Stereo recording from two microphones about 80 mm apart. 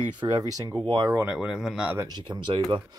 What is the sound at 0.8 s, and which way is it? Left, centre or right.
Speech, right.